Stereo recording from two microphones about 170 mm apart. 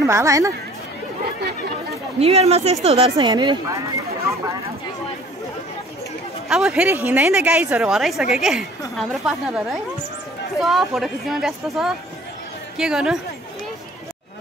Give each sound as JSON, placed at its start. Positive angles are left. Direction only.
{"t": 0.0, "sound": "speech", "side_deg": -20}
{"t": 2.1, "sound": "speech", "side_deg": -35}
{"t": 6.5, "sound": "a woman's voice", "side_deg": -5}